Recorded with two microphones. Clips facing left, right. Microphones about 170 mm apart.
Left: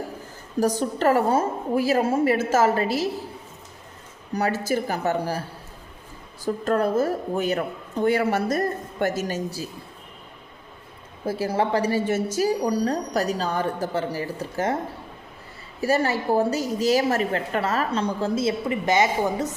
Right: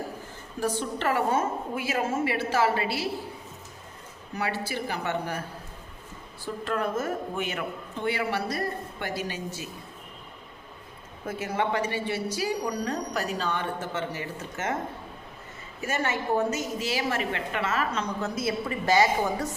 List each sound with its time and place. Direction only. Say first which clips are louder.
0.6 s a woman's voice: left 7 dB; 40° left (ahead or behind)
4.4 s a woman's voice: left 7 dB; 40° left (ahead or behind)
11.3 s a woman's voice: left 5 dB; 35° left (ahead or behind)
15.8 s a woman's voice: left 7 dB; 35° left (ahead or behind); by 19.5 s 20° left (ahead or behind)